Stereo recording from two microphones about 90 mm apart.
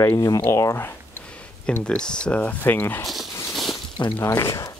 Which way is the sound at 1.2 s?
10° left (ahead or behind).